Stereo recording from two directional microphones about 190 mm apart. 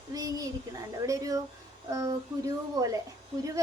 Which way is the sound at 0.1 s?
20° right (ahead or behind).